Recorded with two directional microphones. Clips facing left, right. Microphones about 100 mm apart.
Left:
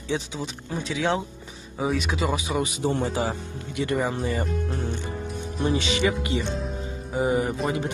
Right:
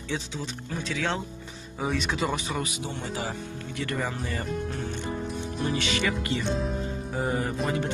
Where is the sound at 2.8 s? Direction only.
40° left (ahead or behind).